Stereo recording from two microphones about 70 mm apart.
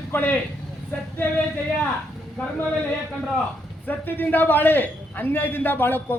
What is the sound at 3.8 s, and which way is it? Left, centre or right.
A man's voice, left.